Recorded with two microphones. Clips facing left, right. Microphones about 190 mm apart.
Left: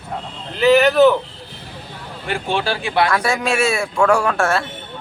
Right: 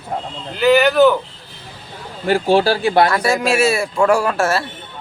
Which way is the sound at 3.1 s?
Centre (ahead or behind).